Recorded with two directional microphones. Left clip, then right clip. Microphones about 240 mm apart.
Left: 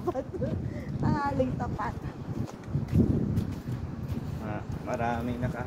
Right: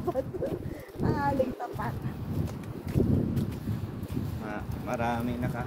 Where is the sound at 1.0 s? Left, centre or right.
Left.